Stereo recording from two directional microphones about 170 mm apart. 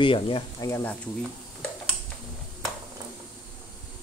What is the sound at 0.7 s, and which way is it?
Speech, 15° left (ahead or behind).